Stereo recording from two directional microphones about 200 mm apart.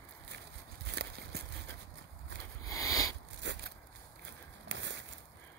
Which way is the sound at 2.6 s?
15° left (ahead or behind).